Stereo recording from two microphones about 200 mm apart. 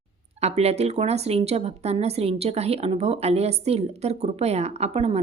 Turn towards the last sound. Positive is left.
turn(degrees=-30)  # may be behind; listen again after turning